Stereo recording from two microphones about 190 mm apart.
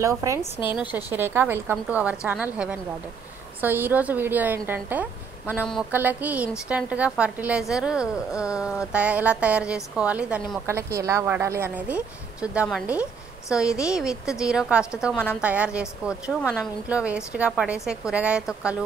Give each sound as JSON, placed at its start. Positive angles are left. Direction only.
{"t": 0.0, "sound": "a woman's voice", "side_deg": -15}
{"t": 0.4, "sound": "a woman's voice", "side_deg": 25}
{"t": 0.7, "sound": "a woman's voice", "side_deg": -10}